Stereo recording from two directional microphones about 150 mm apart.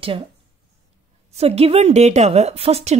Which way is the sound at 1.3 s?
45° right (ahead or behind).